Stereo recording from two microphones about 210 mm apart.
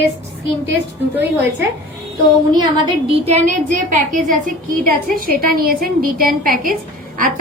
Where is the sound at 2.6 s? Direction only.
25° right (ahead or behind).